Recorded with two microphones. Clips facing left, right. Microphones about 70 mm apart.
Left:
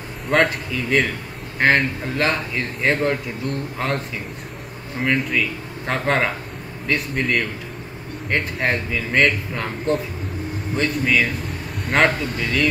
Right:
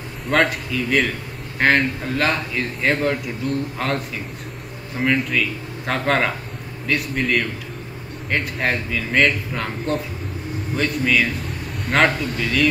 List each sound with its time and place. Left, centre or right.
0.3 s a man's voice: centre